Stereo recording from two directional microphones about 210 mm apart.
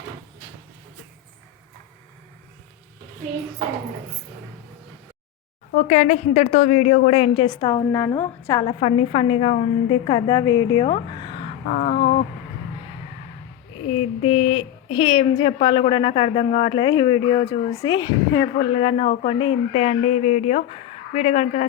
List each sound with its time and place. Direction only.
5.7 s speech: 35° left (ahead or behind); by 8.6 s 15° left (ahead or behind)
8.6 s speech: 25° left (ahead or behind)
11.7 s speech: 40° left (ahead or behind)
14.2 s speech: 30° left (ahead or behind)